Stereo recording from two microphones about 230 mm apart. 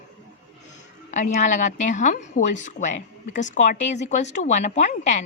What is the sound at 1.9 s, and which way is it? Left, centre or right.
A woman's voice, left.